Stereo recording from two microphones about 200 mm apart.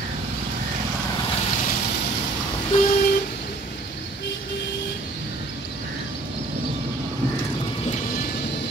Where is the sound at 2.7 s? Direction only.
30° left (ahead or behind).